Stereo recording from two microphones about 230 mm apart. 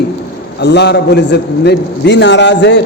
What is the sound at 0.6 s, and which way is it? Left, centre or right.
A man's voice, left.